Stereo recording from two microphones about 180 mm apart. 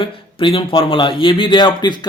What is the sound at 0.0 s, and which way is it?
A man's voice, 30° left (ahead or behind).